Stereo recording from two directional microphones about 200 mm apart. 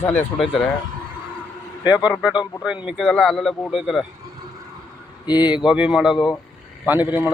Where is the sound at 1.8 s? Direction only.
20° left (ahead or behind).